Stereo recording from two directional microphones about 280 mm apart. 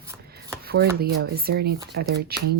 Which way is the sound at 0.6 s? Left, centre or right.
Right.